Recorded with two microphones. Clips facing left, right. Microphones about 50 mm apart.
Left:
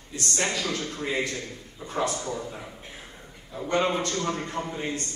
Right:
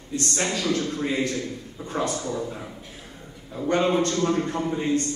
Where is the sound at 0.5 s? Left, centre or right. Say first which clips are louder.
Right 4 dB; right.